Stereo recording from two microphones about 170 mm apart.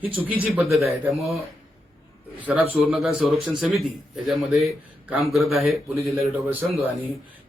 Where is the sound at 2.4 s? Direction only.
5° right (ahead or behind).